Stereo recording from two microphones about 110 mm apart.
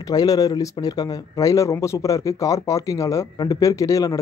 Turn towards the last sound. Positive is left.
turn(degrees=30)  # may be behind; listen again after turning